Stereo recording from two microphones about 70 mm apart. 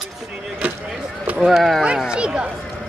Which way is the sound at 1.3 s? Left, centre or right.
Centre.